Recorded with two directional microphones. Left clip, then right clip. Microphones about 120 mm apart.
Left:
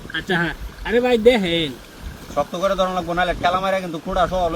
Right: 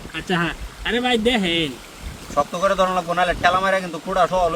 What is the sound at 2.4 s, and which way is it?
Speech, 45° right (ahead or behind).